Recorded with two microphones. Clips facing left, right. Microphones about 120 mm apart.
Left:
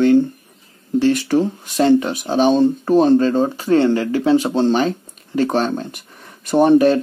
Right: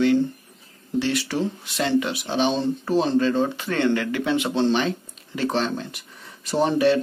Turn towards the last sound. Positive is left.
turn(degrees=50)  # may be behind; listen again after turning